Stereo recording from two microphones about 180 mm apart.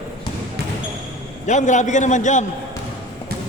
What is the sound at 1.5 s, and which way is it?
Speech, 40° left (ahead or behind).